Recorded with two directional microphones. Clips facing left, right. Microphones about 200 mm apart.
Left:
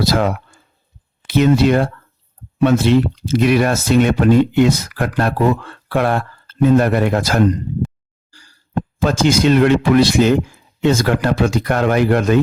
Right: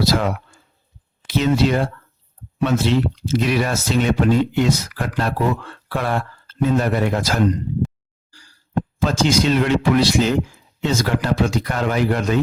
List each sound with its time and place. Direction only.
0.0 s speech: 55° left (ahead or behind)
1.3 s speech: 55° left (ahead or behind)
9.0 s speech: 55° left (ahead or behind)